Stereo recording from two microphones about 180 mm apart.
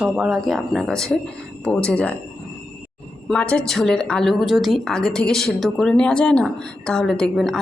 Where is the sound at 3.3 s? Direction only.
5° left (ahead or behind).